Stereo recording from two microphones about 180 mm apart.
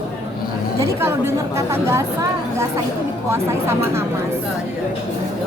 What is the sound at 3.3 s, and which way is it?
Speech, 15° right (ahead or behind).